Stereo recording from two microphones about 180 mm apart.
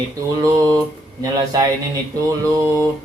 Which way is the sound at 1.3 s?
20° right (ahead or behind).